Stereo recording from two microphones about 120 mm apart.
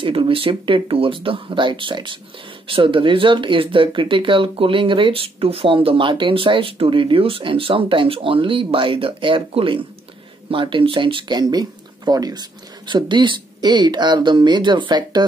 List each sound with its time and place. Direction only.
0.0 s speech: 45° right (ahead or behind)